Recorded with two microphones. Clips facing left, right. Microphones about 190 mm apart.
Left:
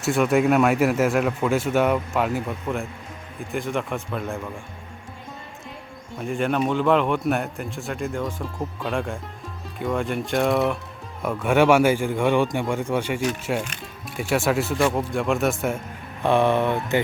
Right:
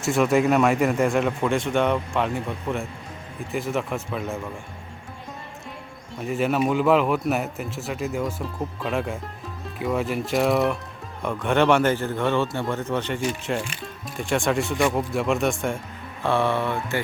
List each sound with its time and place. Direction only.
0.0 s a man's voice: centre (ahead or behind)
6.1 s a man's voice: 5° right (ahead or behind)
16.2 s speech: 15° left (ahead or behind)